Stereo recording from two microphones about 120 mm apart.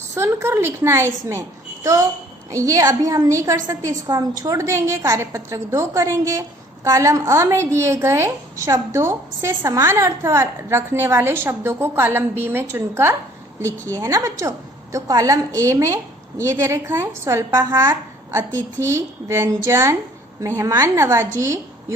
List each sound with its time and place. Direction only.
0.1 s a woman's voice: 20° right (ahead or behind)